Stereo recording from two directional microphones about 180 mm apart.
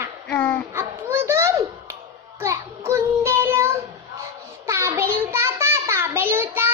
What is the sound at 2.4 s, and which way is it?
Child singing, 15° right (ahead or behind).